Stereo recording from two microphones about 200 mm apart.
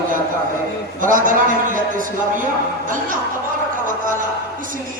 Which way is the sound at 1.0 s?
40° right (ahead or behind).